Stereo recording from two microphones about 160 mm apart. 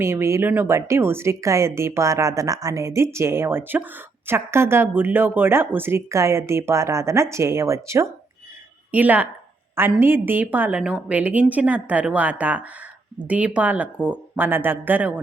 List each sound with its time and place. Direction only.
0.0 s speech: 15° right (ahead or behind)